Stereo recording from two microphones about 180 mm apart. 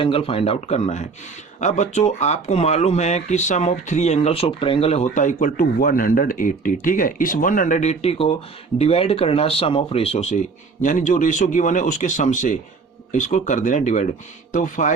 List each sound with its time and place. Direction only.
0.0 s speech: 30° left (ahead or behind)